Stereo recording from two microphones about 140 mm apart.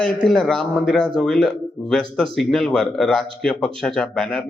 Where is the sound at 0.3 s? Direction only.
5° left (ahead or behind).